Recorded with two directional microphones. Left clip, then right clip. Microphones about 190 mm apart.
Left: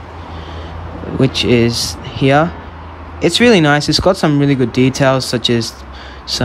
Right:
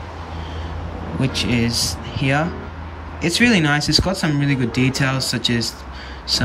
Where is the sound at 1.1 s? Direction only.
25° left (ahead or behind).